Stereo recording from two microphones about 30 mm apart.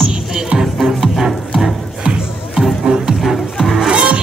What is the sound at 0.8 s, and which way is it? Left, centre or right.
Music, centre.